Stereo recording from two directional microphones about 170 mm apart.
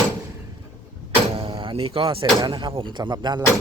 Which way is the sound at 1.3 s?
30° right (ahead or behind).